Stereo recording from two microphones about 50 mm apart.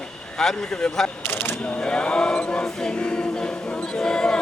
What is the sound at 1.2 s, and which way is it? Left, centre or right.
Speech, left.